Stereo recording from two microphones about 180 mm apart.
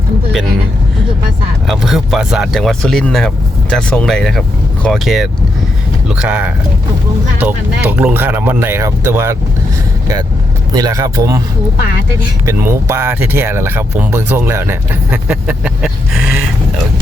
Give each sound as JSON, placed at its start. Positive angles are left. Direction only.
{"t": 1.6, "sound": "speech", "side_deg": 0}
{"t": 10.8, "sound": "speech", "side_deg": -20}
{"t": 12.5, "sound": "speech", "side_deg": -15}